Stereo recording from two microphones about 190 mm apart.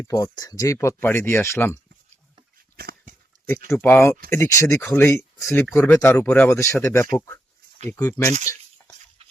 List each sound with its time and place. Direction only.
0.0 s speech: 20° left (ahead or behind)
2.7 s a sound: 50° right (ahead or behind)
3.7 s speech: 10° left (ahead or behind)